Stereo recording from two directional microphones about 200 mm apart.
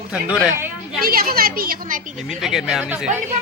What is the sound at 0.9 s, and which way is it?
A woman's voice, 50° right (ahead or behind).